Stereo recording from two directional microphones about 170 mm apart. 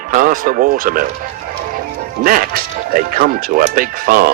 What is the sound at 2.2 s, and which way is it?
Speech, 55° right (ahead or behind).